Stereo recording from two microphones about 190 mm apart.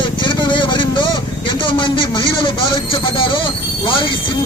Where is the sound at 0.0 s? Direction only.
25° left (ahead or behind).